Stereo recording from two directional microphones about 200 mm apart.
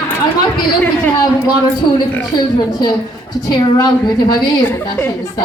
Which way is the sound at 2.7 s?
20° left (ahead or behind).